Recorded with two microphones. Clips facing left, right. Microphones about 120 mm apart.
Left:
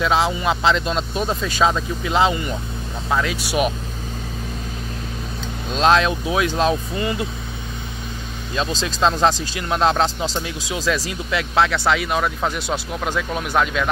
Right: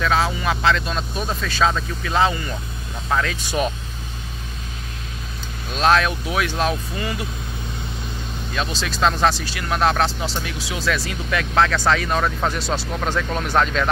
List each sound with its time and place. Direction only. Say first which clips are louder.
0.0 s speech: left 2 dB; 20° left (ahead or behind)
5.7 s speech: left 1 dB; 25° left (ahead or behind)
8.5 s speech: left 2 dB; 25° left (ahead or behind); by 13.8 s 10° left (ahead or behind)